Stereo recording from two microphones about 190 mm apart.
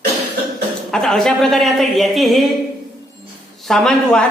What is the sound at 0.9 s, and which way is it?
A woman's voice, centre (ahead or behind).